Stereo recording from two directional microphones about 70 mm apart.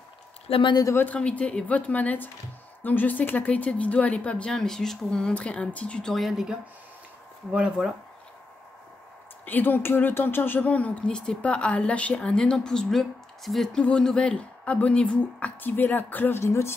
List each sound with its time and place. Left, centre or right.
0.9 s a woman's voice: left; by 6.4 s centre
7.5 s speech: centre
9.5 s a woman's voice: left; by 13.7 s centre
13.7 s speech: centre
15.6 s a woman's voice: left